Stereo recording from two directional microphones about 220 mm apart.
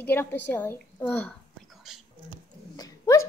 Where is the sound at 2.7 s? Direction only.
15° left (ahead or behind).